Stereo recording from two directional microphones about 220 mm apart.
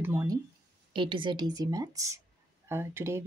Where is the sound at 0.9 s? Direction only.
20° right (ahead or behind).